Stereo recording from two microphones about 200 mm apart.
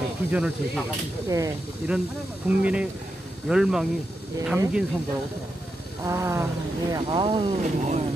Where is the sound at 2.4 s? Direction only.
5° right (ahead or behind).